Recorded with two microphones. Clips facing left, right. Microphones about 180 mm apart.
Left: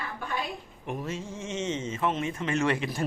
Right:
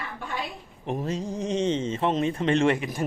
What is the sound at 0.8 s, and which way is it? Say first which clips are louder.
Speech: right 6 dB; 35° right (ahead or behind).